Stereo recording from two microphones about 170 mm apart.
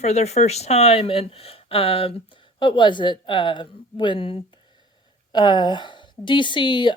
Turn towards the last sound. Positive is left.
turn(degrees=25)  # may be behind; listen again after turning